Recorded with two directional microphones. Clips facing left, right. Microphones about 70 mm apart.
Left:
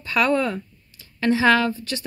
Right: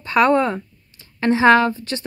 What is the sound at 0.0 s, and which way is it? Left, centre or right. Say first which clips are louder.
A woman's voice: right 5 dB; right.